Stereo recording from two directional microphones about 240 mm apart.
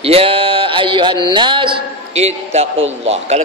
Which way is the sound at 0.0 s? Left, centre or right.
Right.